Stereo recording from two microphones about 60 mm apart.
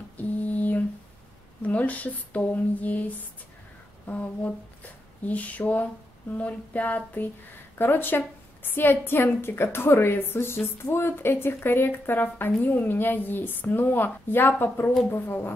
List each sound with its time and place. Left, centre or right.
0.2 s a sound: left
1.6 s speech: left
4.1 s a woman's voice: left